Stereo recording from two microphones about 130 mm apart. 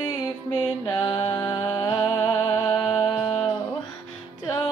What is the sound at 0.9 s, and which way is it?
Music, 35° left (ahead or behind).